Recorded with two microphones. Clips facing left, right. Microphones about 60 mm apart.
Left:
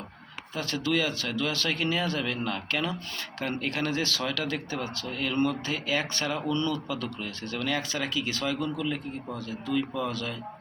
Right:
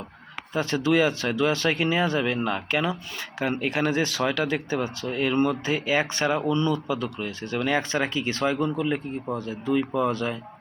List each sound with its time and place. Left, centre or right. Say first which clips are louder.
0.5 s speech: right 6 dB; right